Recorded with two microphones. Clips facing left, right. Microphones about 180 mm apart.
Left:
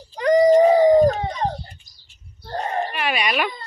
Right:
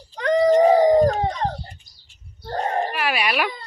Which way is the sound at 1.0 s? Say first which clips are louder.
Left 1 dB; 10° left (ahead or behind).